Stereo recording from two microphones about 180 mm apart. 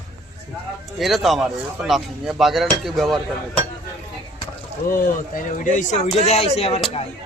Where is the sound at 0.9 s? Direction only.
Centre (ahead or behind).